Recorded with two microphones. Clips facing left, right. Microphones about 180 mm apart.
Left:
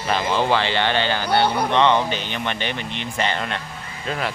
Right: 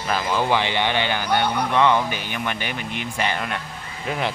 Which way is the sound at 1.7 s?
20° left (ahead or behind).